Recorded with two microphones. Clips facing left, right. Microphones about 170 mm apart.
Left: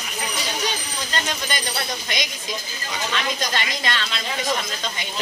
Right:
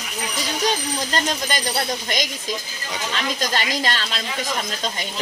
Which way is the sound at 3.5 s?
40° right (ahead or behind).